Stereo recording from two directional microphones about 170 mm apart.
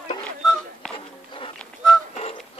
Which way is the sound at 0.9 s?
30° left (ahead or behind).